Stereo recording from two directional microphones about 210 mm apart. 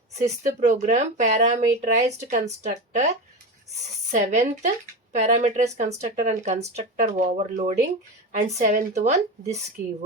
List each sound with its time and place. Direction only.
0.2 s speech: 35° right (ahead or behind)
4.1 s speech: 35° right (ahead or behind)